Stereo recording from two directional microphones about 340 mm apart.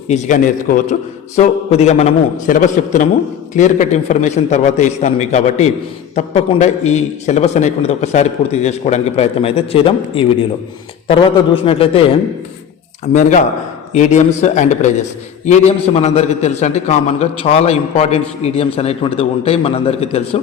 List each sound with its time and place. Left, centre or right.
0.1 s a man's voice: left
13.9 s a man's voice: left